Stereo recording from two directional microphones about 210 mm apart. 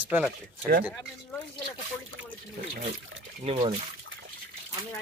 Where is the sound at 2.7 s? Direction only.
40° right (ahead or behind).